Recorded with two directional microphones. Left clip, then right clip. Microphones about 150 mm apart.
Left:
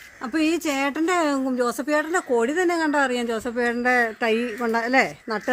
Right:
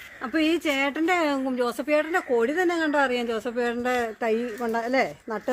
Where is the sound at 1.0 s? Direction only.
90° left.